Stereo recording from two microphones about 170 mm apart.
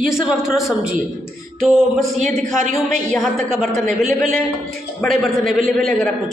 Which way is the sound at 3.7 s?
50° right (ahead or behind).